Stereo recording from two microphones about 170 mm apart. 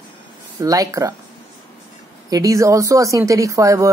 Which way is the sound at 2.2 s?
20° right (ahead or behind).